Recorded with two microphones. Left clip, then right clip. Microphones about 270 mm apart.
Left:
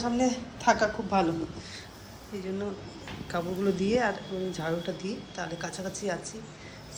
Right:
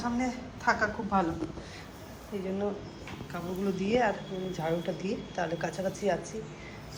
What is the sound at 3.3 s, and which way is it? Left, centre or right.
A woman's voice, centre.